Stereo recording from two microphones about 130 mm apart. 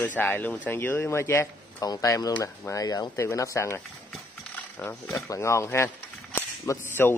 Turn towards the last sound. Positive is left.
turn(degrees=20)  # may be behind; listen again after turning